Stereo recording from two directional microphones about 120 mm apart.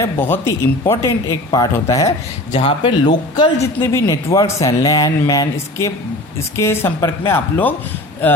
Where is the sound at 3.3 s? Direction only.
35° left (ahead or behind).